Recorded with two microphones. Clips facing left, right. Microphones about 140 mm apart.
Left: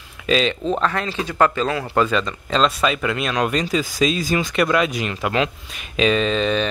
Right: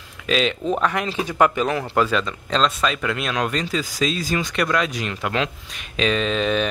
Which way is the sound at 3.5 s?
15° left (ahead or behind).